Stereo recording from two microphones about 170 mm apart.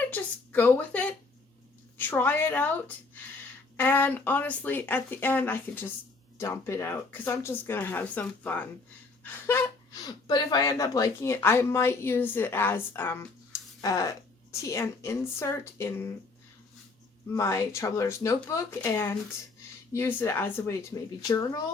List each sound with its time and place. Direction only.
0.1 s speech: 10° left (ahead or behind)
9.2 s gasp: 10° left (ahead or behind)
10.0 s speech: 25° left (ahead or behind)
17.3 s speech: 15° left (ahead or behind)